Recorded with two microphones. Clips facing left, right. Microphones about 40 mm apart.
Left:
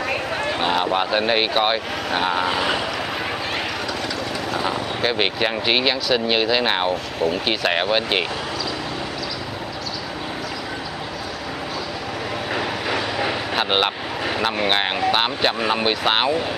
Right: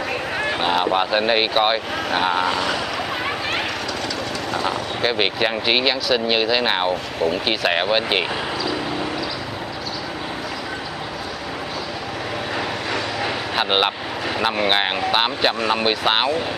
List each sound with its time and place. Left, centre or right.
0.4 s speech: centre
2.5 s speech: centre
4.5 s speech: centre
12.5 s vehicle: centre
13.7 s speech: centre